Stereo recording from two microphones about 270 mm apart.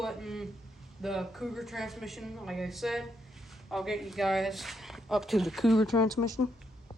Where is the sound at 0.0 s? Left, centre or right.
Centre.